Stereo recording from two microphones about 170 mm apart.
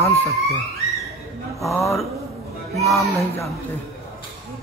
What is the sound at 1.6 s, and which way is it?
Speech, 20° left (ahead or behind).